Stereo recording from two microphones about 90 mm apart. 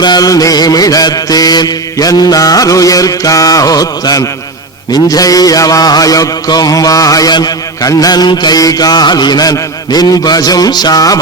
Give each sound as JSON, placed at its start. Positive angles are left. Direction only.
{"t": 0.0, "sound": "mantra", "side_deg": 50}